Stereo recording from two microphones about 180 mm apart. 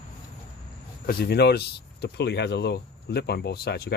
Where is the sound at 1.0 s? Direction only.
60° left (ahead or behind).